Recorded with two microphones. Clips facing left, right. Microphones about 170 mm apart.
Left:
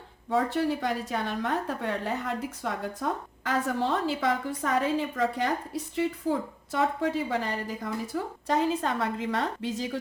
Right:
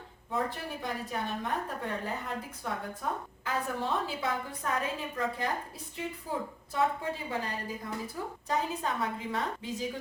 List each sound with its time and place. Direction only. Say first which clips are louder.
0.3 s a woman's voice: left 8 dB; 85° left